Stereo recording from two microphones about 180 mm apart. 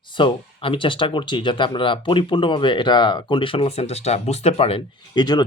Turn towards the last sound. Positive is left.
turn(degrees=25)  # may be behind; listen again after turning